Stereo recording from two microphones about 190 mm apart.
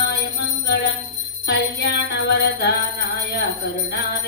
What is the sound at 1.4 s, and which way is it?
Music, 60° left (ahead or behind).